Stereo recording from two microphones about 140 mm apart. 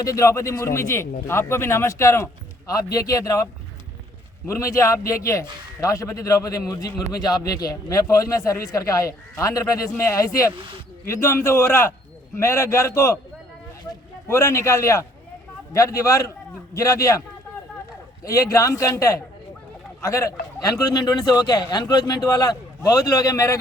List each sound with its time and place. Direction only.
0.0 s a man's voice: 25° left (ahead or behind)
14.3 s a man's voice: 20° left (ahead or behind)